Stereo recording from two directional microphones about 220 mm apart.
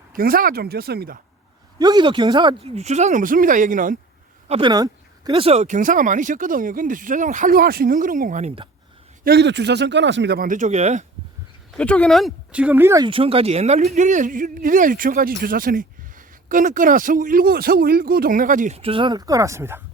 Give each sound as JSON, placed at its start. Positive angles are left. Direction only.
{"t": 0.1, "sound": "speech", "side_deg": -40}
{"t": 1.8, "sound": "a man's voice", "side_deg": -20}
{"t": 4.4, "sound": "a man's voice", "side_deg": -25}
{"t": 9.2, "sound": "speech", "side_deg": -50}
{"t": 11.8, "sound": "speech", "side_deg": 5}
{"t": 13.1, "sound": "a man's voice", "side_deg": -25}